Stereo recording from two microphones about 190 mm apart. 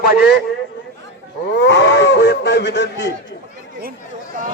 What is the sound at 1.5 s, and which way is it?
Speech, 65° left (ahead or behind).